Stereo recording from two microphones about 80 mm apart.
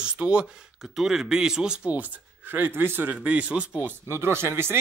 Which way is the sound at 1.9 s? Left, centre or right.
Right.